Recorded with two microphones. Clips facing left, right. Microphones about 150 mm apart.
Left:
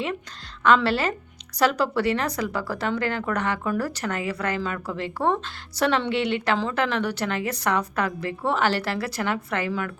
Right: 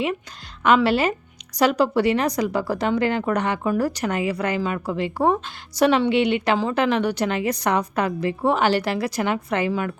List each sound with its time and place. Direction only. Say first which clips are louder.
0.6 s speech: right 3 dB; 15° right (ahead or behind)